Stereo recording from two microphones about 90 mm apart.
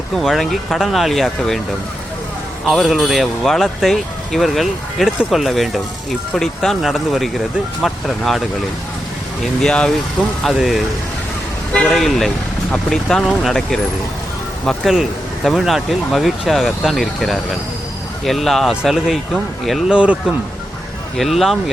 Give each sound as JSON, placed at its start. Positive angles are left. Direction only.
{"t": 0.2, "sound": "speech", "side_deg": 0}
{"t": 2.6, "sound": "speech", "side_deg": 0}
{"t": 10.4, "sound": "speech", "side_deg": 0}
{"t": 11.9, "sound": "speech", "side_deg": 5}
{"t": 19.9, "sound": "speech", "side_deg": -10}
{"t": 21.2, "sound": "speech", "side_deg": 0}